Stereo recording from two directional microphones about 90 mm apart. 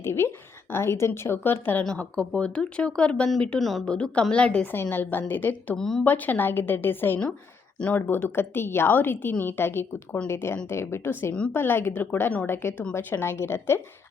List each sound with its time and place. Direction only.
0.0 s a woman's voice: 30° left (ahead or behind)
1.8 s a woman's voice: 10° left (ahead or behind)
5.7 s a woman's voice: 5° left (ahead or behind)
6.1 s a woman's voice: 20° left (ahead or behind)